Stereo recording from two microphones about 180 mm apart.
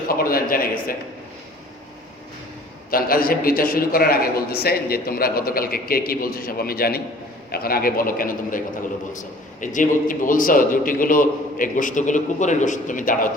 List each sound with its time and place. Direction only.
0.1 s a man's voice: 55° left (ahead or behind)
2.9 s a man's voice: 55° left (ahead or behind)